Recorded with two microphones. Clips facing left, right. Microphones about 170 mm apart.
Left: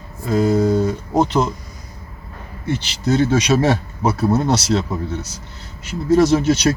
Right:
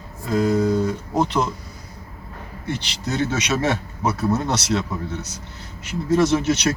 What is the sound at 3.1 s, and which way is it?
Speech, 30° left (ahead or behind).